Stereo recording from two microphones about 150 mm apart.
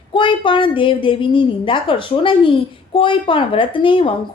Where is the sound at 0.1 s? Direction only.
35° left (ahead or behind).